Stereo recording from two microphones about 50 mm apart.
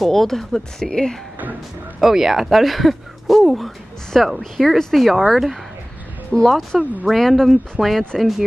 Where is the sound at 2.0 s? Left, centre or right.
Centre.